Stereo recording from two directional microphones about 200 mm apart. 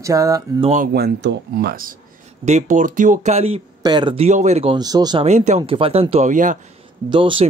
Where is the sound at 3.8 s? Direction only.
20° right (ahead or behind).